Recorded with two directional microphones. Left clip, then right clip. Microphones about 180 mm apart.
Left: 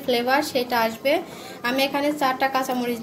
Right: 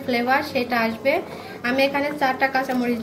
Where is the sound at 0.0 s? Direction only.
30° left (ahead or behind).